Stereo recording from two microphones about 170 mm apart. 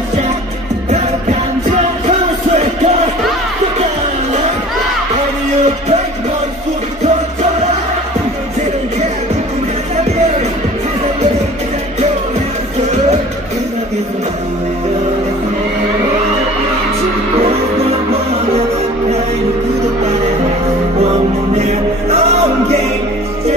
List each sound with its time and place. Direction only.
1.7 s music: 45° right (ahead or behind)
21.0 s music: 40° right (ahead or behind)